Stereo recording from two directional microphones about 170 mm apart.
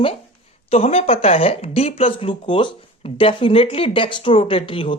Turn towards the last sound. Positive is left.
turn(degrees=30)  # may be behind; listen again after turning